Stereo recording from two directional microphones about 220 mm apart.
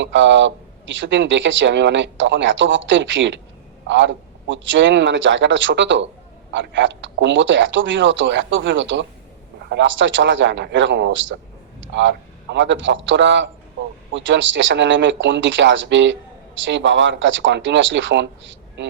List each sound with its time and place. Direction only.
0.0 s a man's voice: 55° right (ahead or behind)